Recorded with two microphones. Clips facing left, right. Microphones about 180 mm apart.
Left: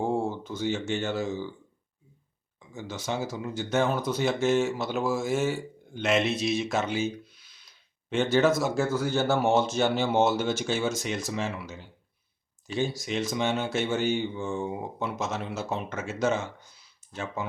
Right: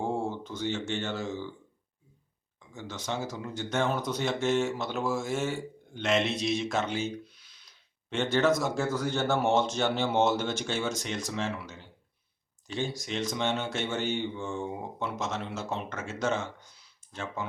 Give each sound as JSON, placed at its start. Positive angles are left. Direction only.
{"t": 0.0, "sound": "speech", "side_deg": 5}
{"t": 2.6, "sound": "speech", "side_deg": 10}